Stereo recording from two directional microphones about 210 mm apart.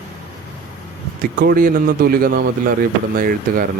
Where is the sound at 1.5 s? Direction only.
40° right (ahead or behind).